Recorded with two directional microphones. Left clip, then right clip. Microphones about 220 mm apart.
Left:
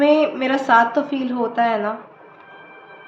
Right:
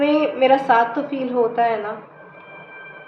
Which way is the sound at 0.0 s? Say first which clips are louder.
Left 1 dB; 50° left (ahead or behind).